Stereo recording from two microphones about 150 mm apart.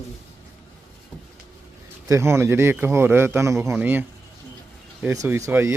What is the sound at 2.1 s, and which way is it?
Speech, 20° right (ahead or behind).